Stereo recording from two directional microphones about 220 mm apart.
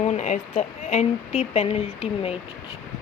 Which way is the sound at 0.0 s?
30° left (ahead or behind).